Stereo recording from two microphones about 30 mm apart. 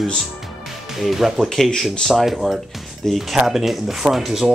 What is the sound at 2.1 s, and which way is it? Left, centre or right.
Speech, centre.